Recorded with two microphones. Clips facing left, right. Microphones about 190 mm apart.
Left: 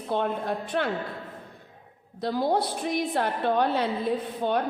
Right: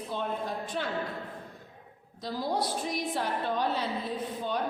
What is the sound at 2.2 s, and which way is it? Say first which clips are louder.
A woman's voice: left 6 dB; 60° left (ahead or behind).